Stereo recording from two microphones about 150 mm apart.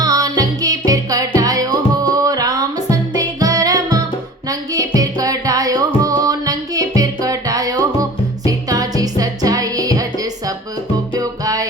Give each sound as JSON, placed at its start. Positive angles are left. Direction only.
{"t": 0.0, "sound": "music", "side_deg": -25}